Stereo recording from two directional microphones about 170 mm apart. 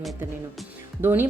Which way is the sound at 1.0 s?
15° right (ahead or behind).